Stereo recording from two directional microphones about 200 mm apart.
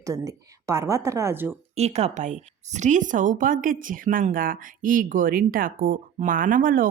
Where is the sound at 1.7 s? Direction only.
30° right (ahead or behind).